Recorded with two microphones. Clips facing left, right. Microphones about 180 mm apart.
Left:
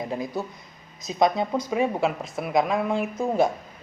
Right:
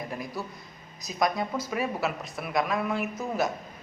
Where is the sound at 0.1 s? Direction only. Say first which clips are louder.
Left 6 dB; 25° left (ahead or behind).